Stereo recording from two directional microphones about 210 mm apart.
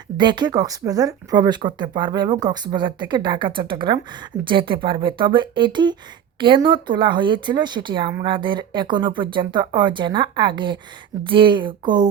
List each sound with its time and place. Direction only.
0.2 s speech: 20° right (ahead or behind)